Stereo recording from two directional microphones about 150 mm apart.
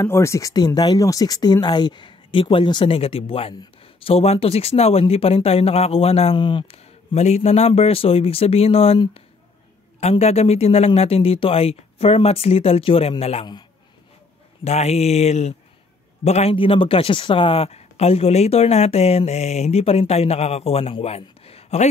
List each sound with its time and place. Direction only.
0.0 s speech: 20° left (ahead or behind); by 13.5 s 40° left (ahead or behind)
14.6 s speech: 45° left (ahead or behind)